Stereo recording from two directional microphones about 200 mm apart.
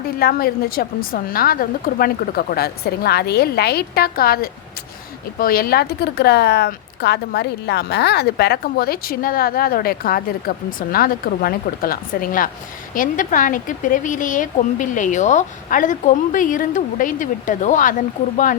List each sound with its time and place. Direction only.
0.2 s speech: 50° left (ahead or behind)